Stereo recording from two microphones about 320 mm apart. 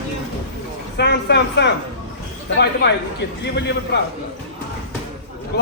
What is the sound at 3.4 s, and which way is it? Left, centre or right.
Speech, left.